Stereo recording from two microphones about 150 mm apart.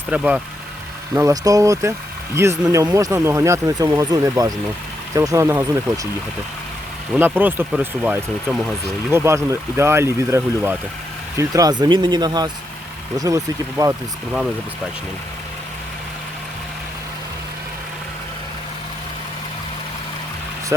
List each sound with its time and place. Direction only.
0.1 s speech: 10° right (ahead or behind)
1.1 s speech: 20° right (ahead or behind)
7.2 s speech: 15° right (ahead or behind)